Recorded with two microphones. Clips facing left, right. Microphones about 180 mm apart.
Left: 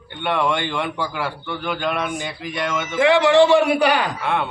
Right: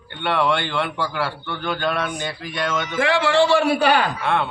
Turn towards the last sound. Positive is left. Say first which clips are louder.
# right 1 dB
turn(degrees=15)  # may be behind; listen again after turning